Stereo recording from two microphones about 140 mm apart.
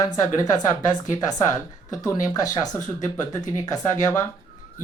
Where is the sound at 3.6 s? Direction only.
25° left (ahead or behind).